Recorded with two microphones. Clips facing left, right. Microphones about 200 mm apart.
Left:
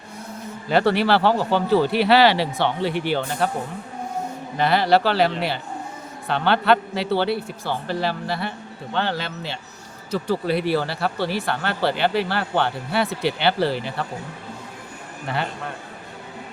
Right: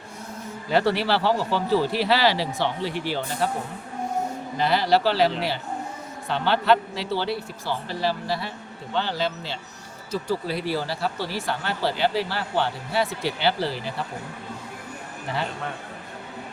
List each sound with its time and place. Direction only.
0.7 s speech: 60° left (ahead or behind)
4.5 s speech: 60° left (ahead or behind)